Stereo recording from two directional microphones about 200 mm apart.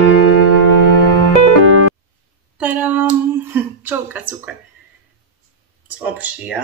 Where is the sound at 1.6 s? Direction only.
90° right.